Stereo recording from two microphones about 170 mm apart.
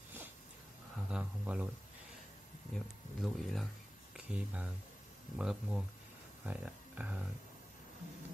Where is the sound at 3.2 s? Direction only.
Centre (ahead or behind).